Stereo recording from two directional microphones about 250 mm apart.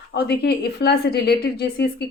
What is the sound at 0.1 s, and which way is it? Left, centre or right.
A woman's voice, left.